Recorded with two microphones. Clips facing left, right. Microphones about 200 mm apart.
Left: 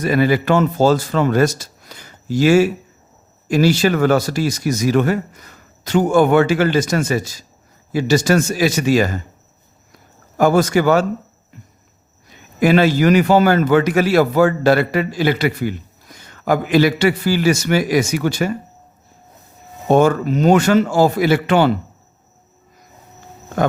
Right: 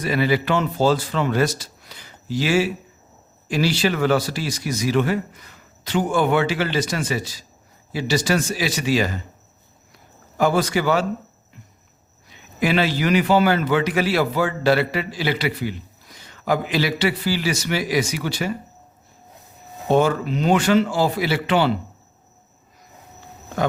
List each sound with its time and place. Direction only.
0.0 s a man's voice: 45° left (ahead or behind)
10.3 s a man's voice: 45° left (ahead or behind)
12.3 s a man's voice: 45° left (ahead or behind)
19.9 s a man's voice: 45° left (ahead or behind)